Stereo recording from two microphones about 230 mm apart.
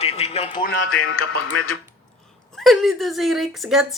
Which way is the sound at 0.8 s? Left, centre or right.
Left.